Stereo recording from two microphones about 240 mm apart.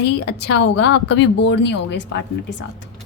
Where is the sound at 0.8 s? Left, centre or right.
Left.